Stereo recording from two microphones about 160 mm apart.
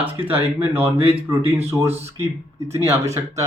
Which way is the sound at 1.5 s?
40° right (ahead or behind).